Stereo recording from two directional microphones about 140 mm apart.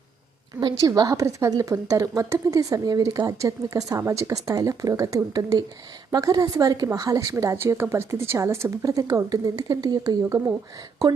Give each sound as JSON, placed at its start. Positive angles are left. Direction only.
{"t": 0.6, "sound": "speech", "side_deg": -25}